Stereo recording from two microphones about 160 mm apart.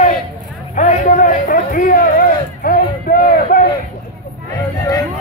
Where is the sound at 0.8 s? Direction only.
50° left (ahead or behind).